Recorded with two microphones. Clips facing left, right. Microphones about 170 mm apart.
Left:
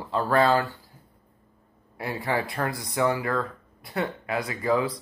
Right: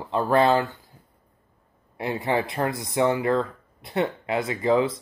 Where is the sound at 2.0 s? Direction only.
20° right (ahead or behind).